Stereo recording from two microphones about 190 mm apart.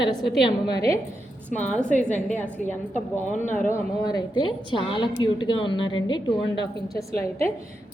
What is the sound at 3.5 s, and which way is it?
Speech, 10° left (ahead or behind).